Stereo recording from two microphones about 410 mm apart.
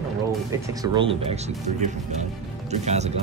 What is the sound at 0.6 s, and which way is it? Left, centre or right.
Speech, centre.